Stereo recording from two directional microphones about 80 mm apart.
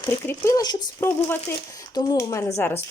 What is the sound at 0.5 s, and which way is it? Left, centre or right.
Speech, left.